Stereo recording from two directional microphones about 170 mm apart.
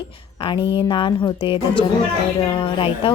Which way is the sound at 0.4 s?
30° left (ahead or behind).